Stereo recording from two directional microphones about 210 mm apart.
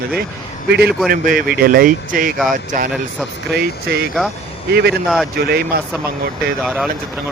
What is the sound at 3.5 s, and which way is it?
Speech, 50° right (ahead or behind).